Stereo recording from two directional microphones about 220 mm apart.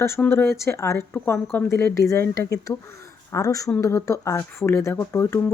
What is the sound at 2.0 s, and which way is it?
Speech, 15° left (ahead or behind).